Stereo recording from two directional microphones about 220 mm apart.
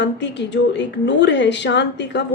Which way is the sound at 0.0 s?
55° left (ahead or behind).